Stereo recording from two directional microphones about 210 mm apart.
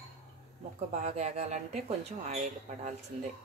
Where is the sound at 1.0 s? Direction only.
30° right (ahead or behind).